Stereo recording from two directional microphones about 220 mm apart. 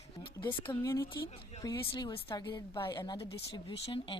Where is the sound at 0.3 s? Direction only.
20° left (ahead or behind).